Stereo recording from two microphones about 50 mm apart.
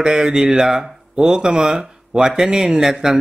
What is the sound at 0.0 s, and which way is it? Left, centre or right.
Speech, centre.